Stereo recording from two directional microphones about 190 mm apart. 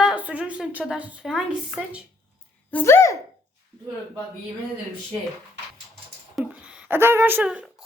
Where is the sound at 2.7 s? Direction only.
15° left (ahead or behind).